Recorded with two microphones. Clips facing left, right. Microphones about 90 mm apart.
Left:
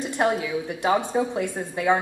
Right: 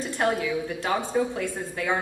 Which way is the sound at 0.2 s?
15° left (ahead or behind).